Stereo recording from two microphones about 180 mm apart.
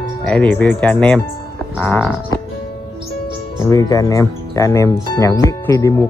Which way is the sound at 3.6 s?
20° left (ahead or behind).